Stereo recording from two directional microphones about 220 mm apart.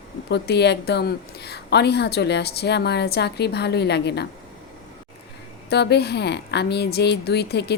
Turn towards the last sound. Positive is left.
turn(degrees=50)  # may be behind; listen again after turning